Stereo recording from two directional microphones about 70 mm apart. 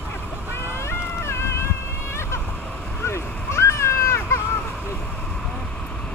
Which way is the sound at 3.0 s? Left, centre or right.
Left.